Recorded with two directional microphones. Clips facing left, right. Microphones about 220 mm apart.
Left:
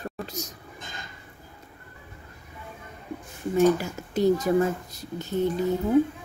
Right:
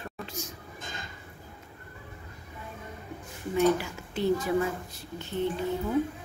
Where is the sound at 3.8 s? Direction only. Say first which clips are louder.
Left 6 dB; 40° left (ahead or behind).